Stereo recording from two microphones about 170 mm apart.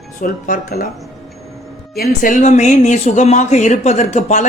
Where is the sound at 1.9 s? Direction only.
55° left (ahead or behind).